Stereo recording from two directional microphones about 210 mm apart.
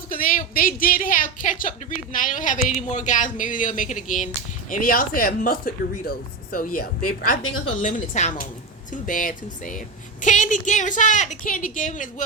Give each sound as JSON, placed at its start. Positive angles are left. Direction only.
{"t": 0.1, "sound": "a woman's voice", "side_deg": 40}
{"t": 7.4, "sound": "a woman's voice", "side_deg": 75}
{"t": 7.8, "sound": "a woman's voice", "side_deg": 35}